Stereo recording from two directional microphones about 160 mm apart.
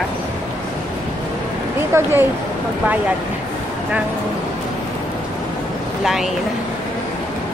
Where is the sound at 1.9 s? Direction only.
15° right (ahead or behind).